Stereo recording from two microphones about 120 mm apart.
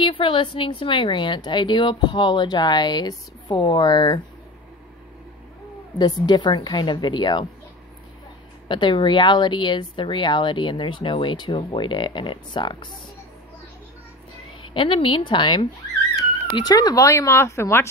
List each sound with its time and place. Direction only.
0.0 s speech: 45° left (ahead or behind)
5.9 s speech: 35° left (ahead or behind)
8.6 s speech: 40° left (ahead or behind)
14.6 s a woman's voice: 45° left (ahead or behind); by 17.8 s 20° left (ahead or behind)